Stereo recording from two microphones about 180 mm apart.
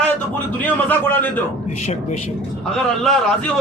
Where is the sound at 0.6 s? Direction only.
10° left (ahead or behind).